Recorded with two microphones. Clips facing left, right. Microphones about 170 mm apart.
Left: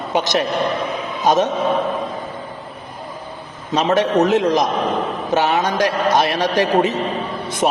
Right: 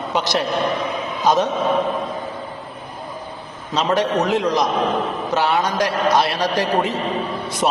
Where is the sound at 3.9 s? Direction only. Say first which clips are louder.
Left 4 dB; 20° left (ahead or behind).